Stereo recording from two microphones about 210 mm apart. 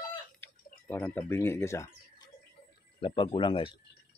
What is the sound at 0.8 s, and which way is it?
Speech, 10° left (ahead or behind).